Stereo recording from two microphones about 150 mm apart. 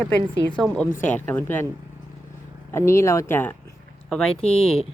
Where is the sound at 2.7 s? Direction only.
20° left (ahead or behind).